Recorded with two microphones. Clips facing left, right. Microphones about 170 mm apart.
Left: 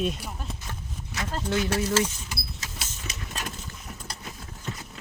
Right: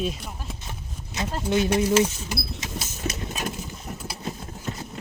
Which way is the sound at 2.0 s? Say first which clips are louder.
Right 5 dB; 25° right (ahead or behind).